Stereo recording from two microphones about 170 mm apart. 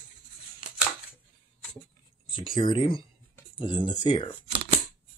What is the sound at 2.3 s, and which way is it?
Speech, 30° left (ahead or behind).